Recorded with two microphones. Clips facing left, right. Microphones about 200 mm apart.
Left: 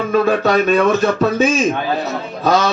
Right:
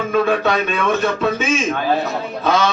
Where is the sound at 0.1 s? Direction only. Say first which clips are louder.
Left 3 dB; 40° left (ahead or behind).